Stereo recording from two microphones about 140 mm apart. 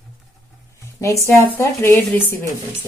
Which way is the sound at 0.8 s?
20° left (ahead or behind).